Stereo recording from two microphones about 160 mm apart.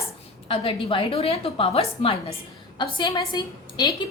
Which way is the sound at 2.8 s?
25° left (ahead or behind).